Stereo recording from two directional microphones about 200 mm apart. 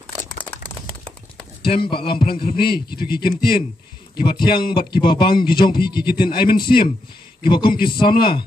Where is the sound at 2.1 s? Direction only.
50° left (ahead or behind).